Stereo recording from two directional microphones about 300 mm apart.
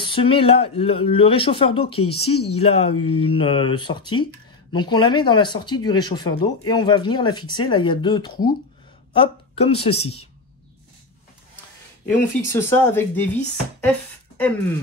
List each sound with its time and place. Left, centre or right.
0.1 s speech: centre
12.1 s speech: centre